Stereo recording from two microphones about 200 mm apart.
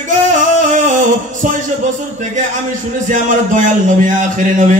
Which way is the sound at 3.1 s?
40° right (ahead or behind).